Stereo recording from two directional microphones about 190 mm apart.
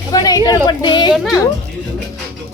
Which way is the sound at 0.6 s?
25° left (ahead or behind).